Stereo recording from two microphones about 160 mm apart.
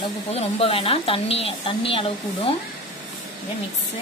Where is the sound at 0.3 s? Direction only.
35° left (ahead or behind).